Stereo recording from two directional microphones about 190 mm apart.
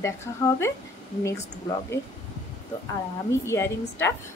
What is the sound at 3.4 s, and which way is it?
Speech, 15° left (ahead or behind).